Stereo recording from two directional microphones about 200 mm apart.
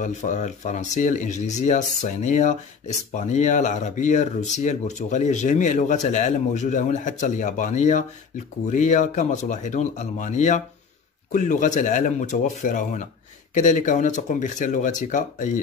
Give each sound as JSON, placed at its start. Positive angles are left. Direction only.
{"t": 0.0, "sound": "speech", "side_deg": 40}